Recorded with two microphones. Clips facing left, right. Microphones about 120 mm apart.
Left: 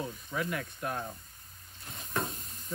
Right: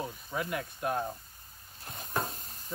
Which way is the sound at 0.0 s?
25° right (ahead or behind).